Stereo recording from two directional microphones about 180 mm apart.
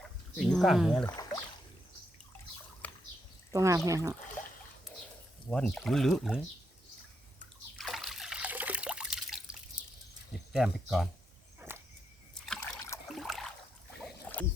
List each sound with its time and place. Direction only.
0.0 s a sound: centre (ahead or behind)
1.0 s rowboat: 20° left (ahead or behind)
2.8 s a sound: 10° left (ahead or behind)
3.5 s speech: 15° right (ahead or behind)
4.4 s a sound: 10° left (ahead or behind)
5.5 s speech: 5° left (ahead or behind)
7.8 s liquid: centre (ahead or behind)
10.5 s speech: centre (ahead or behind)
12.3 s trickle: 5° left (ahead or behind)
13.1 s boat: centre (ahead or behind)